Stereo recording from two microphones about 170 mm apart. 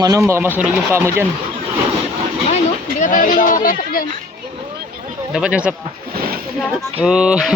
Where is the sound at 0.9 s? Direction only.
15° right (ahead or behind).